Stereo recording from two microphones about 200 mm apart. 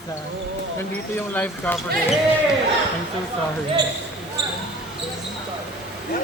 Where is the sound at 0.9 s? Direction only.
10° left (ahead or behind).